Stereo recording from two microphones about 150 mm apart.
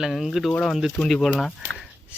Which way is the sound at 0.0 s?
Centre (ahead or behind).